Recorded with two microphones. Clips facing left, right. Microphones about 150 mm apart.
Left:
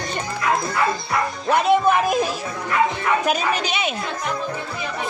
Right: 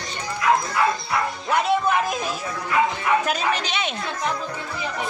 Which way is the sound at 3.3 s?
10° left (ahead or behind).